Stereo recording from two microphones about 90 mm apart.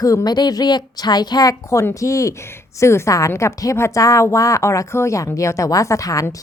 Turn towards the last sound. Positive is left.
turn(degrees=40)  # may be behind; listen again after turning